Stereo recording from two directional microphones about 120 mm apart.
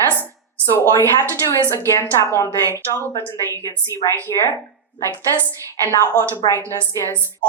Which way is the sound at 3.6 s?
30° left (ahead or behind).